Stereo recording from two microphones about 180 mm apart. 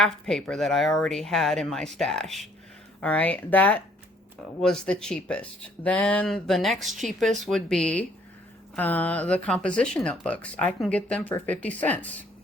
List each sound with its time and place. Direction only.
0.0 s speech: 5° left (ahead or behind)